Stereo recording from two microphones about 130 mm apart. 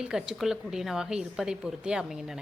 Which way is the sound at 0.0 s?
5° right (ahead or behind).